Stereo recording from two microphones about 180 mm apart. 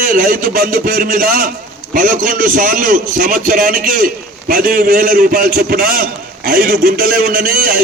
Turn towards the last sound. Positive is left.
turn(degrees=-50)  # may be behind; listen again after turning